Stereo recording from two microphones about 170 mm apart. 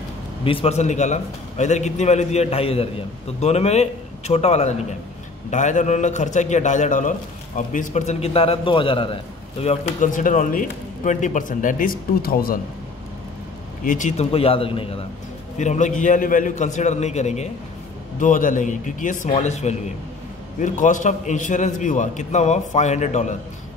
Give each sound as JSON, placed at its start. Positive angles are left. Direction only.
{"t": 0.4, "sound": "a man's voice", "side_deg": 30}
{"t": 13.8, "sound": "a man's voice", "side_deg": 45}
{"t": 15.6, "sound": "a man's voice", "side_deg": 45}